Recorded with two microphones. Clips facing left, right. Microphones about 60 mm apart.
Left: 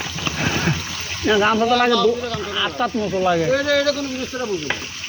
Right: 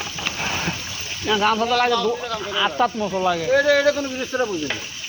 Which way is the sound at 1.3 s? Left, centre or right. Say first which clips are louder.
Left 3 dB; centre.